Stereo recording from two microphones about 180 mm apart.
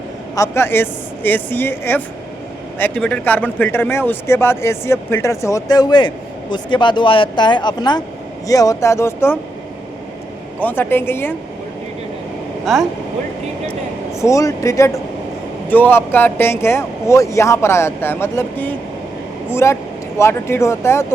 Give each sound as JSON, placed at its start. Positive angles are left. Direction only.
{"t": 0.3, "sound": "speech", "side_deg": 15}
{"t": 10.6, "sound": "speech", "side_deg": 10}
{"t": 12.7, "sound": "speech", "side_deg": 0}
{"t": 14.2, "sound": "speech", "side_deg": 15}